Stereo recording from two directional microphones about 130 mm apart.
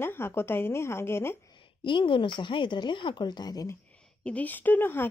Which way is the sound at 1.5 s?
40° left (ahead or behind).